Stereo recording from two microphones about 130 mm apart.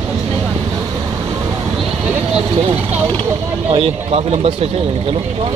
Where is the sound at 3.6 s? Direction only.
50° right (ahead or behind).